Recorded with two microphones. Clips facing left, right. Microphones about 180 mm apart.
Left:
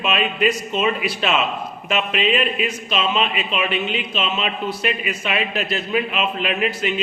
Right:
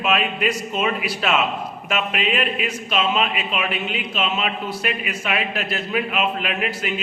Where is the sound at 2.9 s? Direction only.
5° right (ahead or behind).